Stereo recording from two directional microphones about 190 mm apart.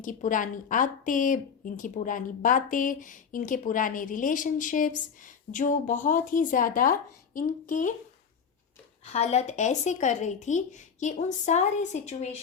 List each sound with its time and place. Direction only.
0.0 s a woman's voice: 45° left (ahead or behind)
9.0 s speech: 35° left (ahead or behind)